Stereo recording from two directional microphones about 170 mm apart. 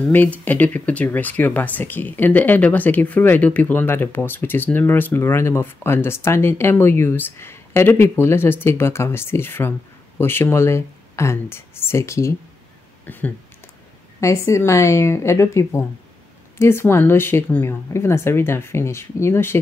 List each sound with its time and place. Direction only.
0.1 s speech: 10° left (ahead or behind)
13.0 s a sound: 10° left (ahead or behind)
14.2 s speech: 15° left (ahead or behind)